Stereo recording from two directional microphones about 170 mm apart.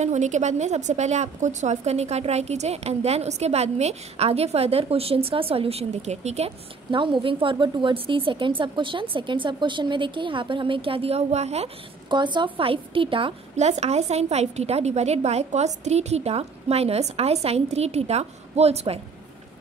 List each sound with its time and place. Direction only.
0.0 s a woman's voice: 45° right (ahead or behind)